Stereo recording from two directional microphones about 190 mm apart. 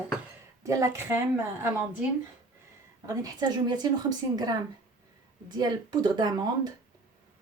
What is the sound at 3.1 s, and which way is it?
A woman's voice, 20° right (ahead or behind).